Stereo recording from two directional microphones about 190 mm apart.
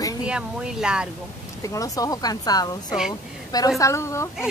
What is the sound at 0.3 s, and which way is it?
Speech, 5° right (ahead or behind).